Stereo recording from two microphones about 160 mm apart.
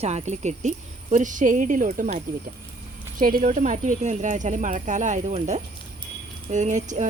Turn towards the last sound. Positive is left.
turn(degrees=-50)  # may be behind; listen again after turning